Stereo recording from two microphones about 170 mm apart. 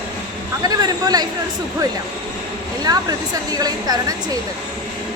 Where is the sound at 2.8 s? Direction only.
20° right (ahead or behind).